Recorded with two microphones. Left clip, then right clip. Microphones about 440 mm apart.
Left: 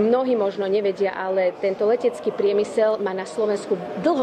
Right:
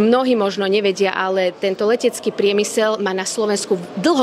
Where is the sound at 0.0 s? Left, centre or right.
Right.